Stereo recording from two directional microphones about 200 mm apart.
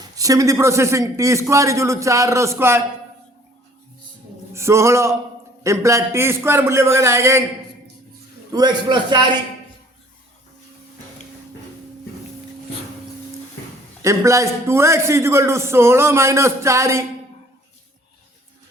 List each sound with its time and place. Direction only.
0.2 s a man's voice: 15° right (ahead or behind)
4.5 s a man's voice: 15° right (ahead or behind)
8.5 s a man's voice: 20° right (ahead or behind)
14.0 s a man's voice: 15° right (ahead or behind)